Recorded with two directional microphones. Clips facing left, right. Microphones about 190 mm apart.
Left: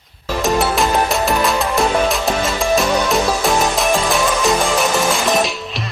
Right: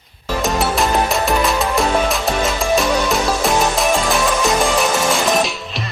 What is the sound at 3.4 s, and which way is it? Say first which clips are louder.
Music: even; centre (ahead or behind).